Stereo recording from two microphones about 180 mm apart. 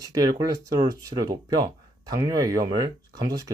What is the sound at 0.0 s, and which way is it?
Speech, 20° right (ahead or behind).